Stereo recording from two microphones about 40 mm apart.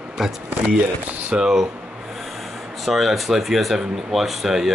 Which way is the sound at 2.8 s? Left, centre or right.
Centre.